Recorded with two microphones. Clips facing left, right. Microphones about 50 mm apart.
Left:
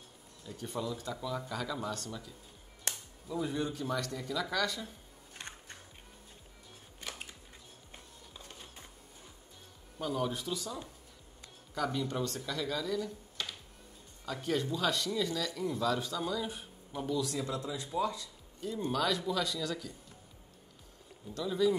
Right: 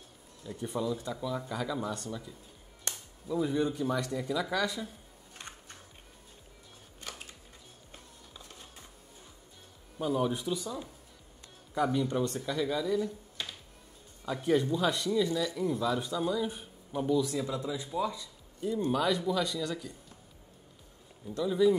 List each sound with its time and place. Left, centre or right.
0.5 s speech: centre
1.0 s a man's voice: centre
2.9 s a sound: centre
4.0 s a man's voice: centre
7.0 s a sound: left
9.9 s a man's voice: centre
11.9 s a man's voice: centre
15.6 s a man's voice: centre
21.5 s a man's voice: centre